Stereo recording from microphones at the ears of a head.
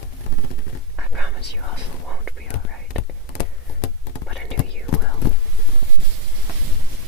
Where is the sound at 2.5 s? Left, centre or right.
Left.